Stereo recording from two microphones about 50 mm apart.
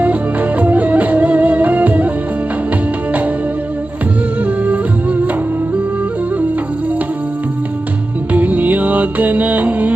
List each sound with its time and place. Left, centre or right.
0.0 s music: right
4.4 s music: right
8.3 s music: right